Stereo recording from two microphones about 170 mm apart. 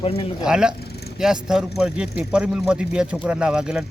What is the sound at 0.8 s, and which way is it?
Vehicle, 70° left (ahead or behind).